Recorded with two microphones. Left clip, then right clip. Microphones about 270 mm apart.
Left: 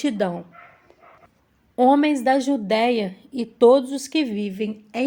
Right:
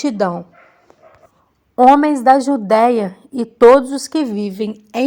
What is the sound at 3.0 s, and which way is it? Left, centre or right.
A woman's voice, right.